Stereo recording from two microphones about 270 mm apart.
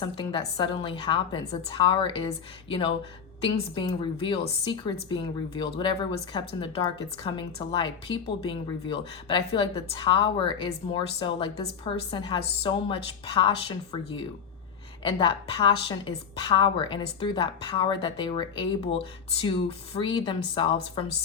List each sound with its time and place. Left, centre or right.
0.0 s a woman's voice: centre